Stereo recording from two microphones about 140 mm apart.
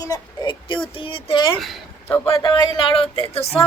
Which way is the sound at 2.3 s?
35° left (ahead or behind).